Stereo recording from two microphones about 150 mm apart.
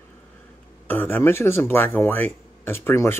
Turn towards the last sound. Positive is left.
turn(degrees=15)  # may be behind; listen again after turning